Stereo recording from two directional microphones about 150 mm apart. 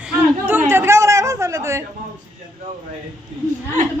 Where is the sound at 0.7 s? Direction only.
15° right (ahead or behind).